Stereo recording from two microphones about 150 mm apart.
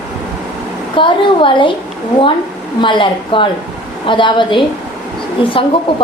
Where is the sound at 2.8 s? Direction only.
30° left (ahead or behind).